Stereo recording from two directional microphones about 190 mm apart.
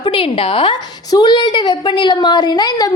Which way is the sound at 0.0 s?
30° left (ahead or behind).